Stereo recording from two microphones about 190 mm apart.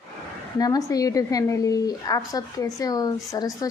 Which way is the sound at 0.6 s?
20° left (ahead or behind).